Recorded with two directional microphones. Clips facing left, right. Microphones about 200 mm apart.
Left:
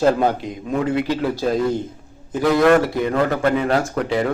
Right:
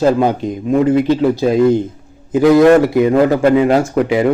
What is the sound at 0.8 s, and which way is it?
Speech, 30° right (ahead or behind).